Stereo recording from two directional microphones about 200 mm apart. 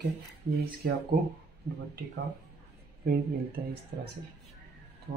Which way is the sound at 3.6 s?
50° right (ahead or behind).